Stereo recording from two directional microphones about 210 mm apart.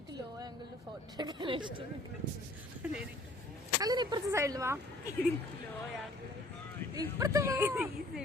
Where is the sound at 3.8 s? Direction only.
20° right (ahead or behind).